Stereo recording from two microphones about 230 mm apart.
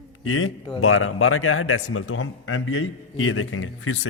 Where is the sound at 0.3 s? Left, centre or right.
Left.